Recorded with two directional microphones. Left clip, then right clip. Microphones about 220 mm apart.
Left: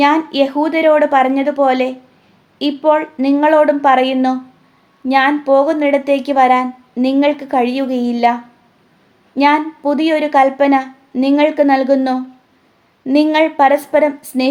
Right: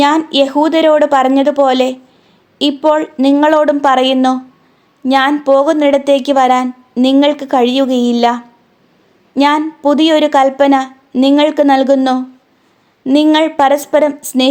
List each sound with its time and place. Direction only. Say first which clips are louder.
0.0 s a woman's voice: right 2 dB; 30° right (ahead or behind)